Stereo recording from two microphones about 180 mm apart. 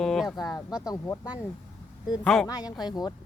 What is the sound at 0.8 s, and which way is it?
Speech, 15° left (ahead or behind).